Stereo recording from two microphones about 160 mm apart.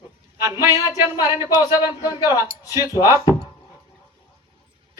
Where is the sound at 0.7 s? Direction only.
25° left (ahead or behind).